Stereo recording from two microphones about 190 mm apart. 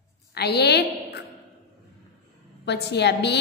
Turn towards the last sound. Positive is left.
turn(degrees=65)  # may be behind; listen again after turning